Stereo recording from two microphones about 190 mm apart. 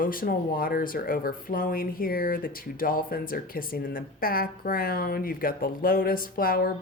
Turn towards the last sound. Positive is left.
turn(degrees=50)  # may be behind; listen again after turning